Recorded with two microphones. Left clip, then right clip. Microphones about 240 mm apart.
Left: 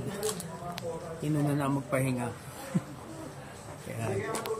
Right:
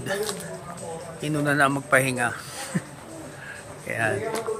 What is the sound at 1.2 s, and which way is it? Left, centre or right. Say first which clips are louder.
Speech: right 11 dB; centre.